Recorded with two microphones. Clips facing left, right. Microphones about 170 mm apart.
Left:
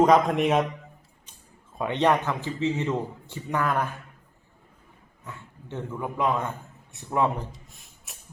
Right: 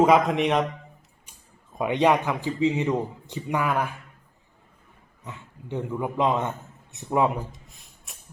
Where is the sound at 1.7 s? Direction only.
15° right (ahead or behind).